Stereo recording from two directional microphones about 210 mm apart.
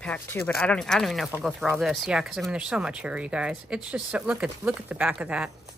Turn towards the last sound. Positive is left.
turn(degrees=-5)  # may be behind; listen again after turning